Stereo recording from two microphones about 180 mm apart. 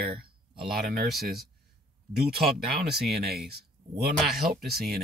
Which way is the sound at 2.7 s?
60° right (ahead or behind).